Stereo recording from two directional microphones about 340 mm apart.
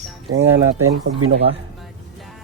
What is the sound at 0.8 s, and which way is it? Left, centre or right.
Speech, right.